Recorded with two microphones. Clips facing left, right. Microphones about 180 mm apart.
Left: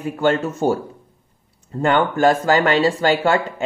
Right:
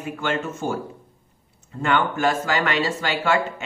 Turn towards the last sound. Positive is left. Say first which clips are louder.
# left 5 dB
turn(degrees=35)  # may be behind; listen again after turning